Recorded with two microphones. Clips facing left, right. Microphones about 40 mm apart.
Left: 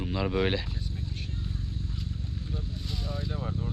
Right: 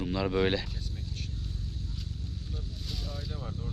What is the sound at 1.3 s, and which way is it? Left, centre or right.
Vehicle, left.